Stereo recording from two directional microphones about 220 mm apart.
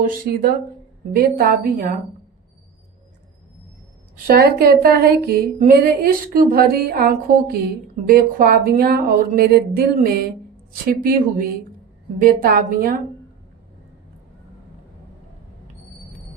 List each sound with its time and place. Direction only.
0.0 s a woman's voice: 40° right (ahead or behind)
4.3 s a woman's voice: 45° right (ahead or behind)